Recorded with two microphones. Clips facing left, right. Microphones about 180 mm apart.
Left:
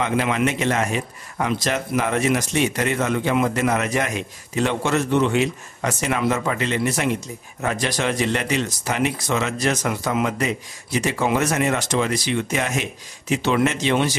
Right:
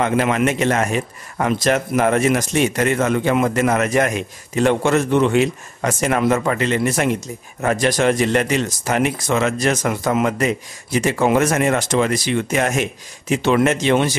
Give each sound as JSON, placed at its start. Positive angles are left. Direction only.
{"t": 0.0, "sound": "speech", "side_deg": -50}